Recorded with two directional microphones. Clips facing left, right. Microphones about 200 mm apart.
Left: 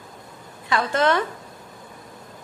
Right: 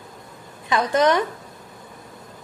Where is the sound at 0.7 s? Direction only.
15° right (ahead or behind).